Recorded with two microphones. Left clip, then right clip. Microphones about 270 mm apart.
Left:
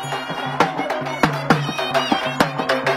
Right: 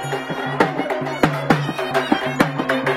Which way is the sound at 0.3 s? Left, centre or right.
Left.